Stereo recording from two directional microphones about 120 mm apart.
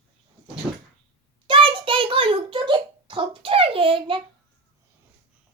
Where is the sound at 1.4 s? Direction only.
45° right (ahead or behind).